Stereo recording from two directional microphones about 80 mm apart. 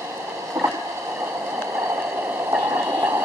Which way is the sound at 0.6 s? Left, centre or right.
Centre.